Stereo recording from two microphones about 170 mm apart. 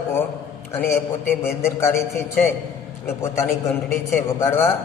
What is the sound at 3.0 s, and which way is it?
A man's voice, 15° left (ahead or behind).